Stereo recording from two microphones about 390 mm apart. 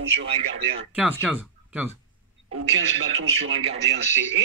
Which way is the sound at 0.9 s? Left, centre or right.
Centre.